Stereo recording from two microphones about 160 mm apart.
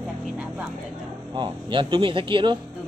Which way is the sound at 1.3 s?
30° right (ahead or behind).